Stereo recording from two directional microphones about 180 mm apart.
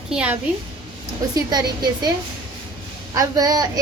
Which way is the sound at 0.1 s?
5° right (ahead or behind).